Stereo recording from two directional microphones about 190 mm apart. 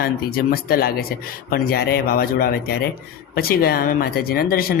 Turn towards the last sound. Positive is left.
turn(degrees=50)  # may be behind; listen again after turning